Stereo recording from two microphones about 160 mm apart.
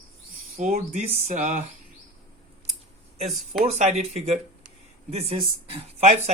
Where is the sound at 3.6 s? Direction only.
45° right (ahead or behind).